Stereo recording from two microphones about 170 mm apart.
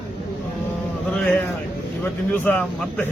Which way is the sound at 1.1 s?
5° left (ahead or behind).